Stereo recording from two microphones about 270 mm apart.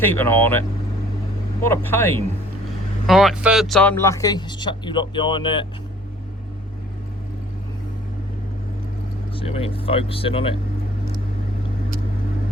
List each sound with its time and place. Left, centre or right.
0.0 s speech: centre
1.7 s speech: centre
9.3 s speech: centre